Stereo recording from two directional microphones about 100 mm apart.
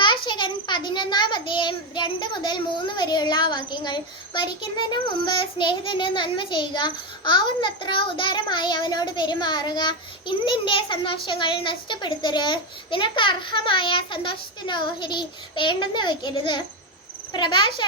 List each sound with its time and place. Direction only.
0.0 s a child's voice: 50° left (ahead or behind)